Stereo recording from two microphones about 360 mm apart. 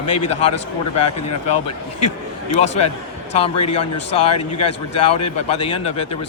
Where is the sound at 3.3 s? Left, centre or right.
Centre.